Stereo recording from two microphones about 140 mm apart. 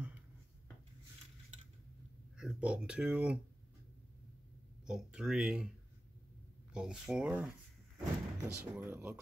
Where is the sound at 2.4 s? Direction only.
5° right (ahead or behind).